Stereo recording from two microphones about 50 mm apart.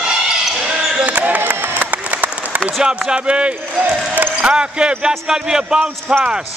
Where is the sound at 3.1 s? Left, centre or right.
Right.